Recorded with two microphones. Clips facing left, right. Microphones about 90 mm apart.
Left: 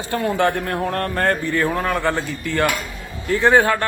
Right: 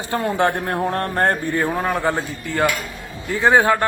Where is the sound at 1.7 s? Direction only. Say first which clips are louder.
Even; 5° right (ahead or behind).